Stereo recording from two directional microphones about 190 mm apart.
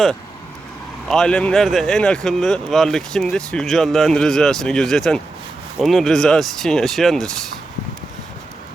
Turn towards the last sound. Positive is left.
turn(degrees=0)  # may be behind; listen again after turning